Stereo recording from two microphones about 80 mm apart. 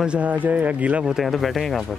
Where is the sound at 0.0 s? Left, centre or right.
Centre.